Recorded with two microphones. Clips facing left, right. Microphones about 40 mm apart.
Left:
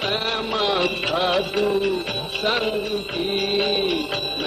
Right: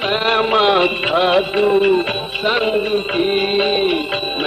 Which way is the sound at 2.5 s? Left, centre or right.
Right.